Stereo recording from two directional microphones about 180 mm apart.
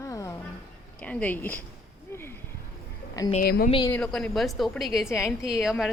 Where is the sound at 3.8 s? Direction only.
5° left (ahead or behind).